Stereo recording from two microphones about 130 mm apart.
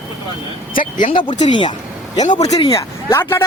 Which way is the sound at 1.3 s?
40° left (ahead or behind).